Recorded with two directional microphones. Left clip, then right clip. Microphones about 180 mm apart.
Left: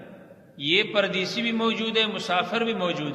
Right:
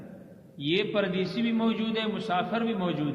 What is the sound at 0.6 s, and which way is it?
A man's voice, 45° left (ahead or behind).